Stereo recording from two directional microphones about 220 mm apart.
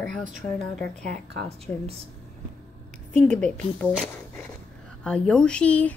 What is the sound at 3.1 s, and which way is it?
Speech, 5° left (ahead or behind).